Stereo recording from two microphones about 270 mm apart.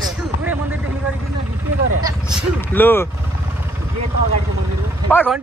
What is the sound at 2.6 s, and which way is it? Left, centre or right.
Speech, centre.